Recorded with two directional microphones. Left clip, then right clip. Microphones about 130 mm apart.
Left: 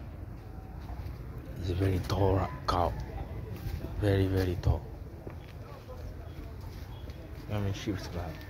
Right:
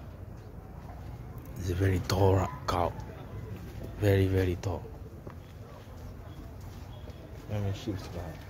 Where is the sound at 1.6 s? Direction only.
40° right (ahead or behind).